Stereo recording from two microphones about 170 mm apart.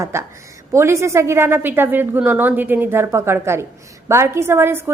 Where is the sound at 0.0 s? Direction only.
15° right (ahead or behind).